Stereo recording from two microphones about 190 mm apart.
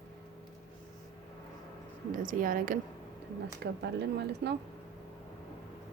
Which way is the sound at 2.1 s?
45° right (ahead or behind).